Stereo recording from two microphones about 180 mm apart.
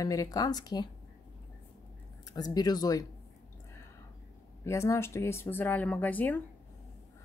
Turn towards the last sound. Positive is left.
turn(degrees=10)  # may be behind; listen again after turning